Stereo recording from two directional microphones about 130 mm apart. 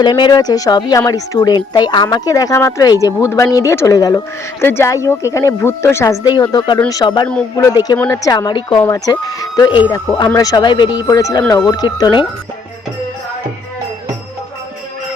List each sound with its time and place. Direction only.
0.0 s speech: 35° left (ahead or behind); by 6.1 s 20° left (ahead or behind)
6.2 s a woman's voice: 30° left (ahead or behind)
11.0 s speech: 25° left (ahead or behind)